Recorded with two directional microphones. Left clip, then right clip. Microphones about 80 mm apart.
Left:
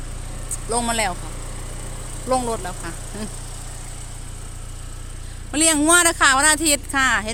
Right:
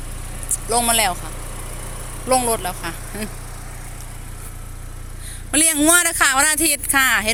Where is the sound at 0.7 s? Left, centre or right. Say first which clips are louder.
Right 4 dB; left.